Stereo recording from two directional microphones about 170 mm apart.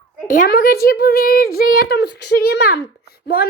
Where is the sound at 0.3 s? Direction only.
60° left (ahead or behind).